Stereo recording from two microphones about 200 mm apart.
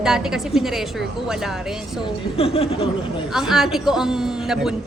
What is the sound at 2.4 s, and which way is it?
Speech, 30° left (ahead or behind).